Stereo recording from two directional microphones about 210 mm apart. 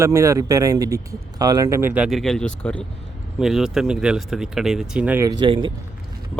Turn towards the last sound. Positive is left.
turn(degrees=-20)  # may be behind; listen again after turning